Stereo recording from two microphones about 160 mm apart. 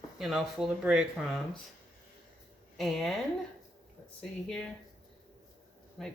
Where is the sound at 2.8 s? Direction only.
Centre (ahead or behind).